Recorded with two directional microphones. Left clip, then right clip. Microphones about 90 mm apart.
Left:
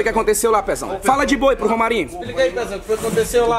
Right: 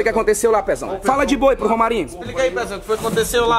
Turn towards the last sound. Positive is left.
turn(degrees=-30)  # may be behind; listen again after turning